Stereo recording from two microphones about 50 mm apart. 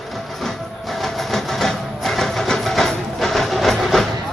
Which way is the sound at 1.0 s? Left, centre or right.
Centre.